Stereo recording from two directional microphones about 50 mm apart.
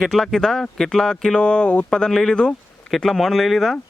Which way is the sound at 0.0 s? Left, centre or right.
Centre.